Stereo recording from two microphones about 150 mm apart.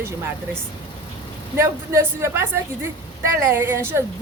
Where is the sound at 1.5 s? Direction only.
15° right (ahead or behind).